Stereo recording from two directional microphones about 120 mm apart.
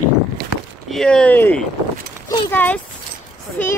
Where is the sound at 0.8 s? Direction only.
5° left (ahead or behind).